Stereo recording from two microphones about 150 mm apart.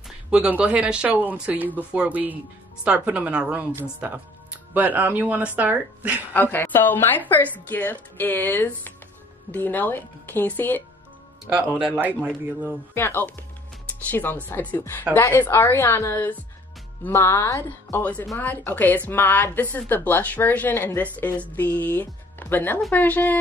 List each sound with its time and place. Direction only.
0.3 s speech: 5° right (ahead or behind)
6.3 s speech: 15° left (ahead or behind)
11.4 s speech: 10° right (ahead or behind)
12.9 s speech: 15° left (ahead or behind)